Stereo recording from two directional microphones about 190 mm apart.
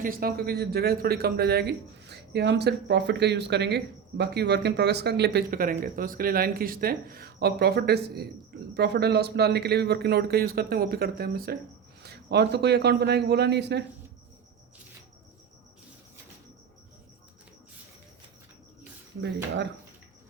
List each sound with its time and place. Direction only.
0.0 s speech: 50° right (ahead or behind)